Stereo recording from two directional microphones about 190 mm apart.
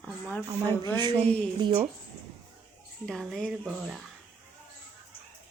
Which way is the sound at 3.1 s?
Centre (ahead or behind).